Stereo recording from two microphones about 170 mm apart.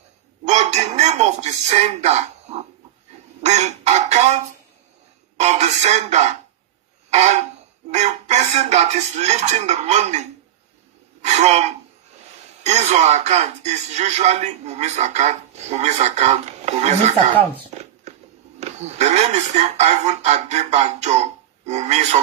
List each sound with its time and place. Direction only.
0.5 s speech: 40° right (ahead or behind)
5.4 s speech: 40° right (ahead or behind)
7.9 s speech: 40° right (ahead or behind)
12.6 s speech: 40° right (ahead or behind)
17.7 s a sound: 40° right (ahead or behind)
18.6 s speech: 40° right (ahead or behind)